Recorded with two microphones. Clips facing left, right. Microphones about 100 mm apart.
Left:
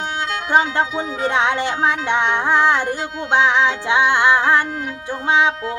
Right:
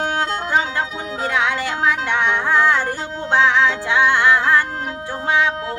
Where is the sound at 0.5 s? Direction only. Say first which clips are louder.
Left 7 dB; 30° left (ahead or behind).